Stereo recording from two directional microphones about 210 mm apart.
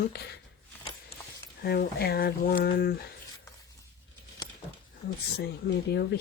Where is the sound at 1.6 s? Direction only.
50° left (ahead or behind).